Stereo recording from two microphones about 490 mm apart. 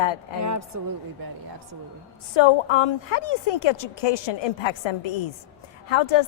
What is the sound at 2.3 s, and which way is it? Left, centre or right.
A woman's voice, left.